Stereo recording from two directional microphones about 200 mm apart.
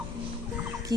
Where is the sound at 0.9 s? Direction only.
20° right (ahead or behind).